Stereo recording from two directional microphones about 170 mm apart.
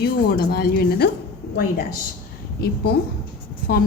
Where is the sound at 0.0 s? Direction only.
65° left (ahead or behind).